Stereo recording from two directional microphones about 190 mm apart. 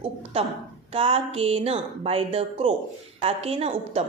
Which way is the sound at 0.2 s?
30° right (ahead or behind).